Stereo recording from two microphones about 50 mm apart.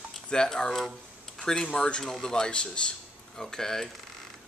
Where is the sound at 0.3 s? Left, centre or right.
Centre.